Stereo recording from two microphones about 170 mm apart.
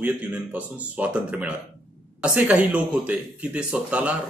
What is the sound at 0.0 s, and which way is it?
Speech, 10° right (ahead or behind).